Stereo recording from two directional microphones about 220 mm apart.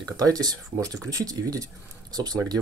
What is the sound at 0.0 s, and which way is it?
Speech, 15° right (ahead or behind).